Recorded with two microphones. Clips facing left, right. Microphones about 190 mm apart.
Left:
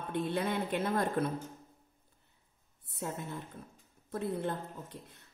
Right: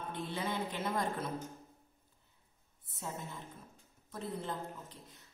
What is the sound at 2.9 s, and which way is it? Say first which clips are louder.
A woman's voice: left 5 dB; 60° left (ahead or behind).